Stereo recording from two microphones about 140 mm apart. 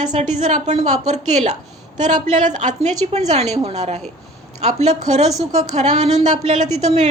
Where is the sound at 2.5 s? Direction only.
55° right (ahead or behind).